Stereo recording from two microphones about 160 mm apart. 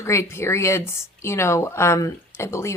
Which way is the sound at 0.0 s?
15° left (ahead or behind).